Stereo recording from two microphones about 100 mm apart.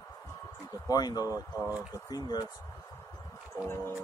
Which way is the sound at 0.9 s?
40° left (ahead or behind).